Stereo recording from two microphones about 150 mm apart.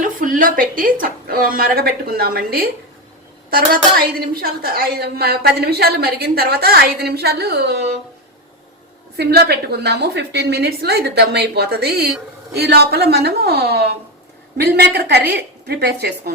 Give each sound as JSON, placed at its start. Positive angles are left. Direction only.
{"t": 0.0, "sound": "a woman's voice", "side_deg": -65}
{"t": 9.1, "sound": "a woman's voice", "side_deg": -90}